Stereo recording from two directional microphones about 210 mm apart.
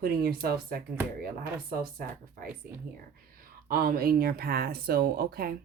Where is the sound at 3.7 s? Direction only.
45° right (ahead or behind).